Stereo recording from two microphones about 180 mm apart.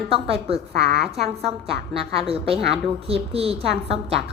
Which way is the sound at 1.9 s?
30° right (ahead or behind).